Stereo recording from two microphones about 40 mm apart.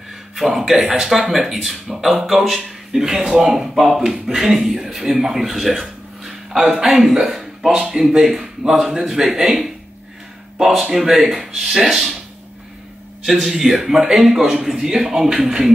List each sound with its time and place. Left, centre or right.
0.4 s speech: centre
13.2 s speech: centre